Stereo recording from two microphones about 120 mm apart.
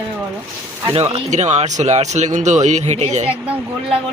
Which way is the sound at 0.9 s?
60° right (ahead or behind).